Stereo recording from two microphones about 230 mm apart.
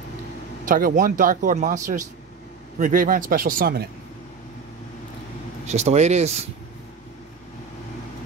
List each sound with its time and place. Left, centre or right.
0.7 s speech: right
5.7 s speech: right